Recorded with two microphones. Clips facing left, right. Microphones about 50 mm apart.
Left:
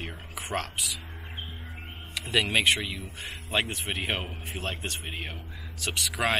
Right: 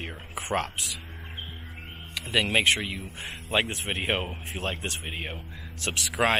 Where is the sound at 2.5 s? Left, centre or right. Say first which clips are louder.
Right 1 dB; right.